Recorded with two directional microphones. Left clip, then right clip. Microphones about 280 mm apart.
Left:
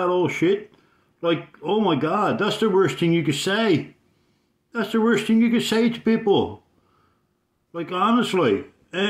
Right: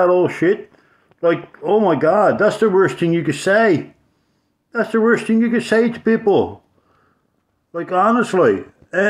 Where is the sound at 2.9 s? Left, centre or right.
Centre.